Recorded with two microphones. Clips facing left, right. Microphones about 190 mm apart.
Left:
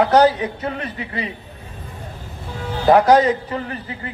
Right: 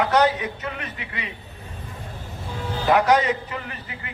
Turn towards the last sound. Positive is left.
turn(degrees=35)  # may be behind; listen again after turning